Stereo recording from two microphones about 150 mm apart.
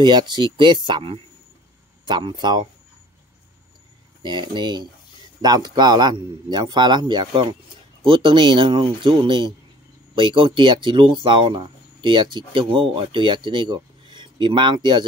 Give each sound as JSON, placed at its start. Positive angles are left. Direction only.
{"t": 0.0, "sound": "speech", "side_deg": -30}
{"t": 4.2, "sound": "speech", "side_deg": -30}